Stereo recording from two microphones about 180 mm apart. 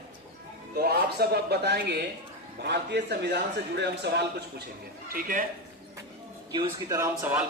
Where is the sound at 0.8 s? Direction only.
60° right (ahead or behind).